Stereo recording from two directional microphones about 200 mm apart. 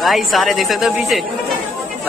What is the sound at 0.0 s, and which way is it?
Speech, centre (ahead or behind).